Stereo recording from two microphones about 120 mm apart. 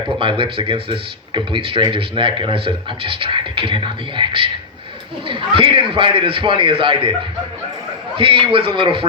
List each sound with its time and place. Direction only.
0.2 s speech: 45° right (ahead or behind)
8.1 s speech: 45° right (ahead or behind)